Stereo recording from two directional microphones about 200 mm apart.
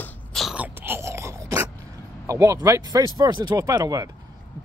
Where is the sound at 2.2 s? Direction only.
15° right (ahead or behind).